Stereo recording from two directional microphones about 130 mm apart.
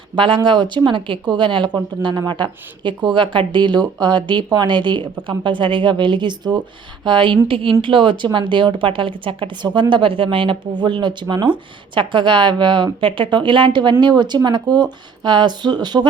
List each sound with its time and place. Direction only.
0.2 s a woman's voice: 40° right (ahead or behind)